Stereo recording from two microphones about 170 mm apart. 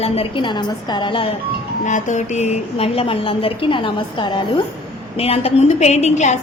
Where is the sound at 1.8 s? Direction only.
45° left (ahead or behind).